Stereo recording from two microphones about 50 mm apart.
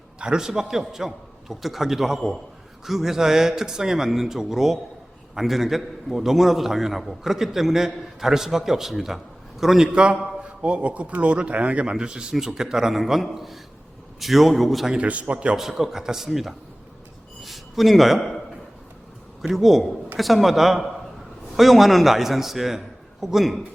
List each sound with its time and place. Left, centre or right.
0.2 s a man's voice: centre
9.9 s a man's voice: right; by 14.9 s centre
14.9 s speech: right
15.5 s a man's voice: centre
17.4 s a sound: centre
19.4 s a man's voice: centre